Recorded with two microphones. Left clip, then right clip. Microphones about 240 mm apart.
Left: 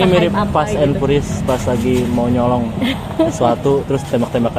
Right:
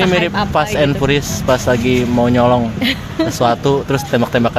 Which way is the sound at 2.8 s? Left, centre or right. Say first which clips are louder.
Even; right.